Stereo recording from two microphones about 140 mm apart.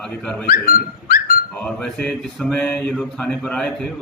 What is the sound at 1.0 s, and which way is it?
Dog, 90° left.